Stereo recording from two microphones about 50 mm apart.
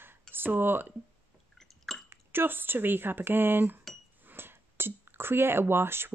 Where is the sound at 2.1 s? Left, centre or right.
Right.